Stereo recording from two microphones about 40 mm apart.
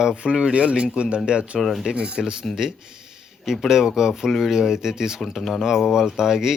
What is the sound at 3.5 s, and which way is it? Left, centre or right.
A man's voice, centre.